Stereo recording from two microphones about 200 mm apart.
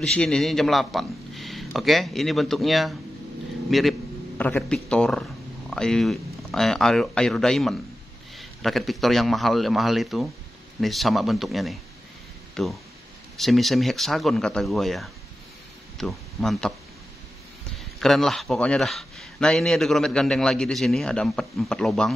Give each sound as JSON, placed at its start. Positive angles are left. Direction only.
{"t": 0.0, "sound": "speech", "side_deg": 5}
{"t": 18.0, "sound": "speech", "side_deg": 0}